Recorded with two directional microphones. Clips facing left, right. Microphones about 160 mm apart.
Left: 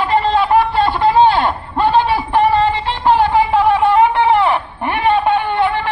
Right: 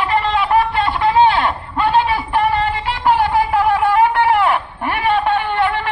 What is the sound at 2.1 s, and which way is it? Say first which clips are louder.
Singing: left 3 dB; 30° left (ahead or behind).